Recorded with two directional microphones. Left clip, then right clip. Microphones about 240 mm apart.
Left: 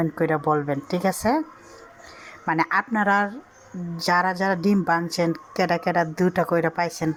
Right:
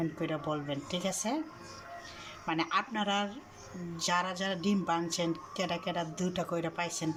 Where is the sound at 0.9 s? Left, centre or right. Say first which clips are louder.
Left 11 dB; left.